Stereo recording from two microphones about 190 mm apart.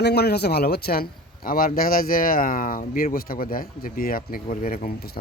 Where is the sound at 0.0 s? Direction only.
60° left (ahead or behind).